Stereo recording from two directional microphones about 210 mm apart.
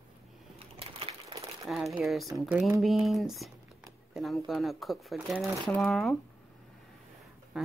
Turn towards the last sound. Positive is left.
turn(degrees=0)  # may be behind; listen again after turning